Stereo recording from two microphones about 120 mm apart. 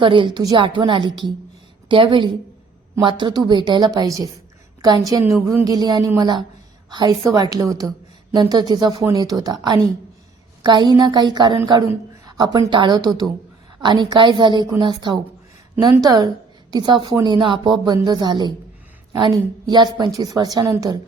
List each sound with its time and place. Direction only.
0.0 s a woman's voice: 45° right (ahead or behind)